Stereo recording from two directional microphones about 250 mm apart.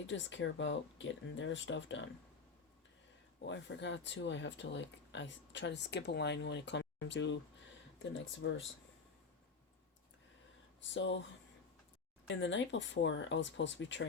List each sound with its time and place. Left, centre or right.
0.1 s speech: left
3.4 s speech: left
10.9 s speech: left
12.3 s speech: left